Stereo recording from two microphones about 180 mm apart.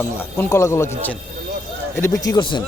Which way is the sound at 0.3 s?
15° left (ahead or behind).